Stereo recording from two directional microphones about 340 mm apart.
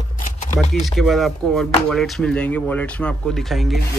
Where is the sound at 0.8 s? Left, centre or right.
Centre.